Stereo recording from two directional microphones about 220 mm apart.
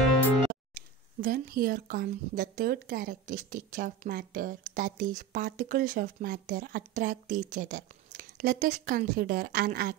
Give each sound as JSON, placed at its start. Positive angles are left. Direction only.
{"t": 0.5, "sound": "speech", "side_deg": -40}